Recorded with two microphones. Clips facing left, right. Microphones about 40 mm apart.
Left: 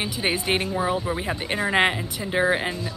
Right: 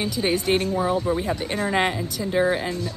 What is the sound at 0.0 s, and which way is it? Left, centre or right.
A woman's voice, left.